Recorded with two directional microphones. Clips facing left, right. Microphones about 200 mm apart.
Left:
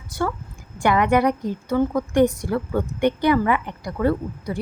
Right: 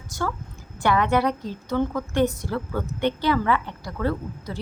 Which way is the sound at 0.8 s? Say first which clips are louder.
Left 3 dB; 15° left (ahead or behind).